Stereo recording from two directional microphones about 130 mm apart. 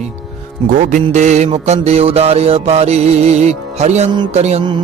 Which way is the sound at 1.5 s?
55° right (ahead or behind).